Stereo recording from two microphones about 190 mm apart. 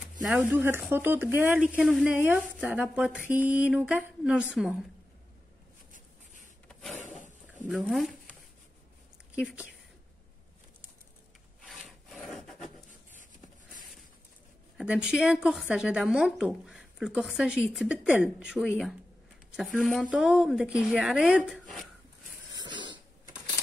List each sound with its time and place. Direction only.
0.2 s a woman's voice: 10° right (ahead or behind)
6.7 s a sound: 5° left (ahead or behind)
7.6 s speech: 5° right (ahead or behind)
11.6 s wood: centre (ahead or behind)
14.8 s a woman's voice: 5° right (ahead or behind)
22.5 s a sound: 25° right (ahead or behind)